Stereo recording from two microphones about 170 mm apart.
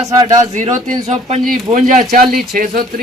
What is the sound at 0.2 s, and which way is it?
Speech, 20° right (ahead or behind).